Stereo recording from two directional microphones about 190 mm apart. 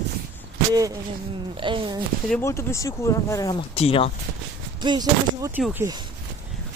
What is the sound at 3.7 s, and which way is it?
Speech, 30° left (ahead or behind).